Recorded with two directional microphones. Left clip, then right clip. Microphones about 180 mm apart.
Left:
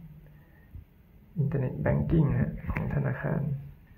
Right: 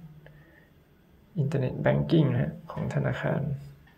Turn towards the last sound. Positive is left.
turn(degrees=-25)  # may be behind; listen again after turning